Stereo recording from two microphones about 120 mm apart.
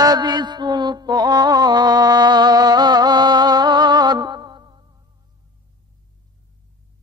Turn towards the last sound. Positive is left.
turn(degrees=-40)  # may be behind; listen again after turning